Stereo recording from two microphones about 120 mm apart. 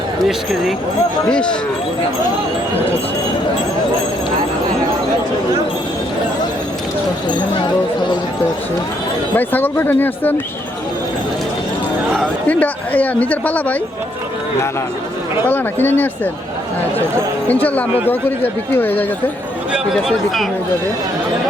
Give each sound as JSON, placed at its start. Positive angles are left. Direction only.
{"t": 1.3, "sound": "speech", "side_deg": 10}
{"t": 9.3, "sound": "speech", "side_deg": 15}
{"t": 12.5, "sound": "speech", "side_deg": 15}
{"t": 15.4, "sound": "speech", "side_deg": 15}
{"t": 17.5, "sound": "speech", "side_deg": 15}
{"t": 19.7, "sound": "speech", "side_deg": -5}